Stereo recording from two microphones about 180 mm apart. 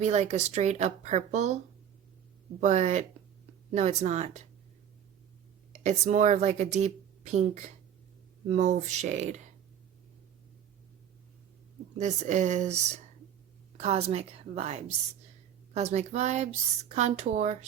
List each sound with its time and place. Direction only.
0.0 s speech: 40° right (ahead or behind)
2.6 s speech: 40° right (ahead or behind)
5.8 s speech: 40° right (ahead or behind)
11.9 s speech: 40° right (ahead or behind)